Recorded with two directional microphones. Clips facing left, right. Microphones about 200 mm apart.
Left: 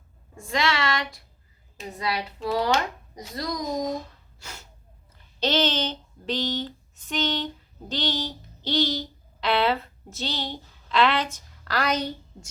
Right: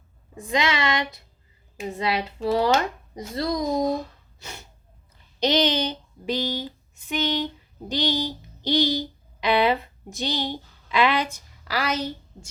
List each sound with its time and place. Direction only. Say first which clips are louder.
0.3 s a woman's voice: right 2 dB; 15° right (ahead or behind)
4.4 s snort: right 3 dB; 15° right (ahead or behind)
5.4 s speech: right 3 dB; 15° right (ahead or behind)